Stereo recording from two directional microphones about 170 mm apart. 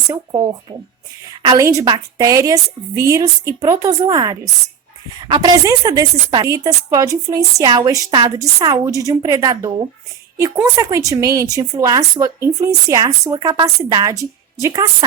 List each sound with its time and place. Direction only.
0.1 s a woman's voice: 20° right (ahead or behind)